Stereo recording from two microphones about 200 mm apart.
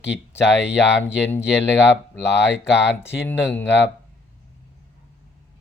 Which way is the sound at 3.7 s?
60° left (ahead or behind).